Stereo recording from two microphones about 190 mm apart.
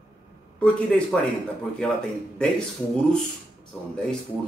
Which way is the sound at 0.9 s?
5° left (ahead or behind).